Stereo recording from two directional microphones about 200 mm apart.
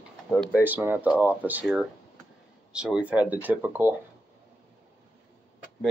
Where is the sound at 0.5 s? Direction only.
10° right (ahead or behind).